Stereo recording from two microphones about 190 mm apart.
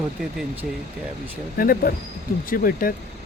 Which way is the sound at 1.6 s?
50° left (ahead or behind).